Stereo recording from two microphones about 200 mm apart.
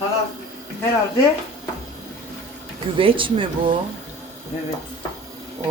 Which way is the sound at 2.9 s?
25° right (ahead or behind).